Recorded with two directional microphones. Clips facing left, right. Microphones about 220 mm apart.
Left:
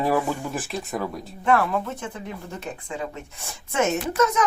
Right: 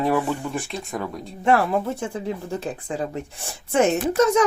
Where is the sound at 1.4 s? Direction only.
25° right (ahead or behind).